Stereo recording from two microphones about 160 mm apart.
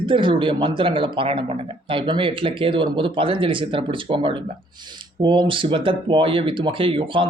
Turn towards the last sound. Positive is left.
turn(degrees=-35)  # may be behind; listen again after turning